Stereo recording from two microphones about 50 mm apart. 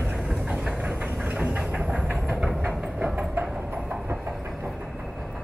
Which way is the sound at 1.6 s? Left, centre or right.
Right.